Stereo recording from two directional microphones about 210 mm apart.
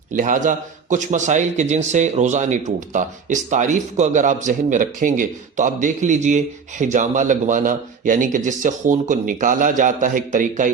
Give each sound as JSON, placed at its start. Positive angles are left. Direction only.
{"t": 0.2, "sound": "a man's voice", "side_deg": -35}